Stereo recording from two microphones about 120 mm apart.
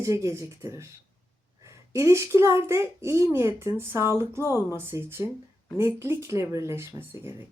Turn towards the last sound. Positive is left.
turn(degrees=-20)  # may be behind; listen again after turning